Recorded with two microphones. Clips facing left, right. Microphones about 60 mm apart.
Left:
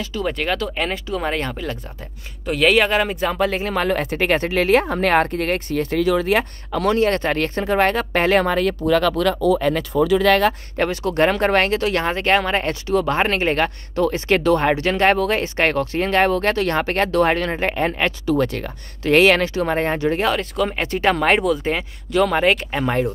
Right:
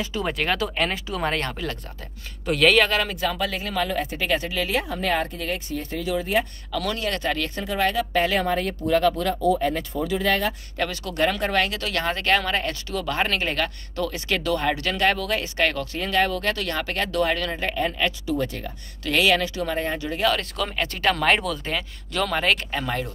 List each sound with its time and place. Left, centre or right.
0.0 s speech: centre
0.3 s speech: centre
2.9 s speech: left
4.0 s speech: left
6.7 s speech: left
8.5 s speech: left
10.8 s speech: left
11.8 s speech: left
19.0 s speech: left
20.3 s speech: centre
20.7 s speech: left